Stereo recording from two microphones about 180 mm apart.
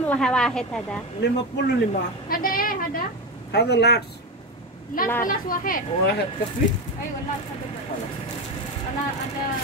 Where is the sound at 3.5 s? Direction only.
65° left (ahead or behind).